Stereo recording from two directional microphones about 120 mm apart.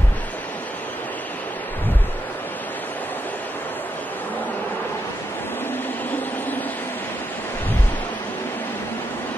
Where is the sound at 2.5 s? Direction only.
15° left (ahead or behind).